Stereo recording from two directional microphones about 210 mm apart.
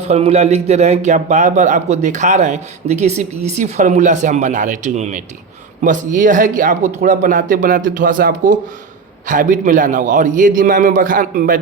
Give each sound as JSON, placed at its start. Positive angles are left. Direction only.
{"t": 0.1, "sound": "a man's voice", "side_deg": -30}